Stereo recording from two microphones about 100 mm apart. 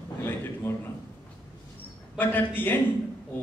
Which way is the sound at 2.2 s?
20° left (ahead or behind).